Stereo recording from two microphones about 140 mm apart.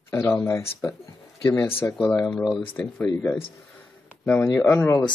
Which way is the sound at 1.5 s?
15° left (ahead or behind).